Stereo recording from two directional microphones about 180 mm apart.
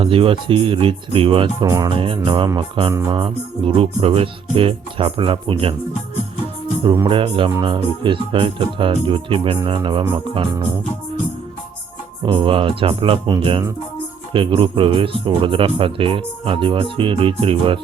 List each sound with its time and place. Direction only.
0.0 s speech: 30° right (ahead or behind)
2.9 s music: 15° right (ahead or behind)
3.2 s speech: 30° right (ahead or behind)
7.1 s speech: 30° right (ahead or behind)
12.2 s speech: 25° right (ahead or behind)